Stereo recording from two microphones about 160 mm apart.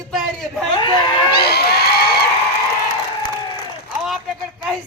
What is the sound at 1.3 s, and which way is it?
Crowd, 85° left.